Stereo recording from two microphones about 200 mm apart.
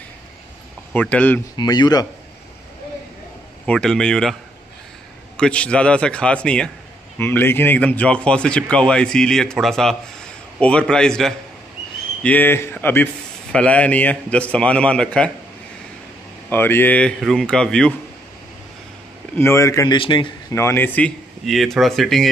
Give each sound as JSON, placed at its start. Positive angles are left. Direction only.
{"t": 0.9, "sound": "a man's voice", "side_deg": 5}
{"t": 1.6, "sound": "a man's voice", "side_deg": 20}
{"t": 3.6, "sound": "a man's voice", "side_deg": 5}
{"t": 5.4, "sound": "a man's voice", "side_deg": 5}
{"t": 16.4, "sound": "a man's voice", "side_deg": 10}
{"t": 19.3, "sound": "a man's voice", "side_deg": 15}